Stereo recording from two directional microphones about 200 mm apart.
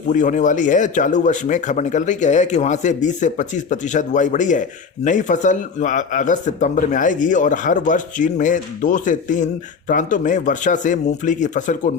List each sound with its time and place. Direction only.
0.1 s speech: 40° left (ahead or behind)